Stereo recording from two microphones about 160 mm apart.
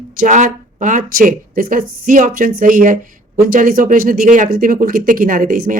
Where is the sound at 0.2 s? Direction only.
55° right (ahead or behind).